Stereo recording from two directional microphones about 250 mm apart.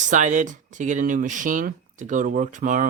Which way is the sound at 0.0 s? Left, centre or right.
Right.